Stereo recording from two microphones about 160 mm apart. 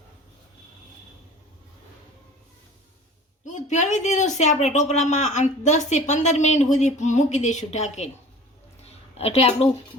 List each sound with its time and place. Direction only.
3.4 s speech: 50° left (ahead or behind)
9.1 s a woman's voice: 40° left (ahead or behind)